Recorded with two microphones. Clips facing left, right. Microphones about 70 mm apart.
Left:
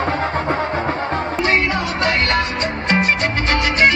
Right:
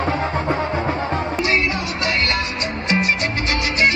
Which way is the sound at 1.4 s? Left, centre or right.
Left.